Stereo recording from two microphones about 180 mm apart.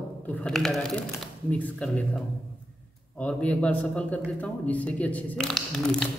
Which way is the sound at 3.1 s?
5° left (ahead or behind).